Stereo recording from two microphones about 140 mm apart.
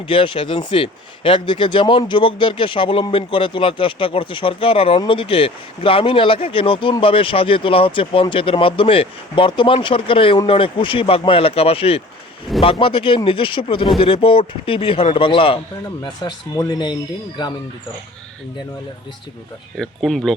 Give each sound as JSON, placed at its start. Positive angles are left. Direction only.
{"t": 0.1, "sound": "speech", "side_deg": 40}
{"t": 19.7, "sound": "speech", "side_deg": 0}